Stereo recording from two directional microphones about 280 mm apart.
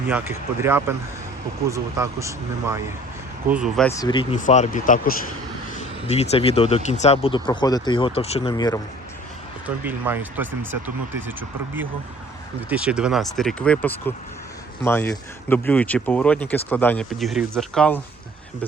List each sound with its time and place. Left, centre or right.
0.1 s speech: centre
3.8 s speech: centre
9.6 s speech: centre